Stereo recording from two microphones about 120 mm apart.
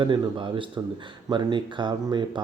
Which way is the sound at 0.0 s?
45° right (ahead or behind).